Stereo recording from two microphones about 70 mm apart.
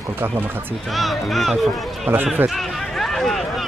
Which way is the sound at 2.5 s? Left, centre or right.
Centre.